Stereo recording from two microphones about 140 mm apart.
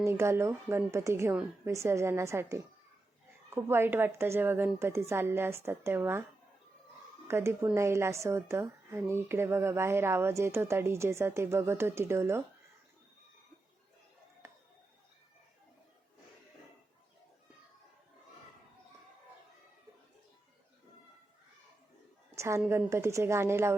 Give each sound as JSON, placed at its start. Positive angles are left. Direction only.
{"t": 0.0, "sound": "a woman's voice", "side_deg": -20}
{"t": 7.3, "sound": "a woman's voice", "side_deg": -20}
{"t": 14.4, "sound": "a sound", "side_deg": -20}
{"t": 22.4, "sound": "a woman's voice", "side_deg": -20}